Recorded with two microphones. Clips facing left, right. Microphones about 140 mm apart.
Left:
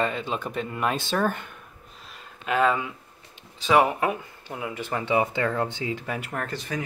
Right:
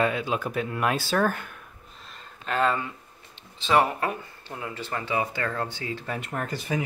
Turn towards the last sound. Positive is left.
turn(degrees=-5)  # may be behind; listen again after turning